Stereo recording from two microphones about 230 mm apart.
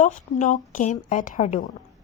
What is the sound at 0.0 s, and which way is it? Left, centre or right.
A woman's voice, left.